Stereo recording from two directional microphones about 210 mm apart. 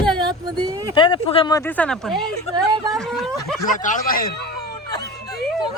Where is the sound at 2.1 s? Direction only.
20° right (ahead or behind).